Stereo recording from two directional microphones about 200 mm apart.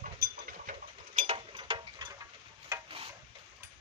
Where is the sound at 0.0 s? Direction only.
45° right (ahead or behind); by 2.2 s 20° right (ahead or behind).